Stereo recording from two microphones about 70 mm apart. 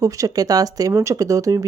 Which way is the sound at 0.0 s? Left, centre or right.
Right.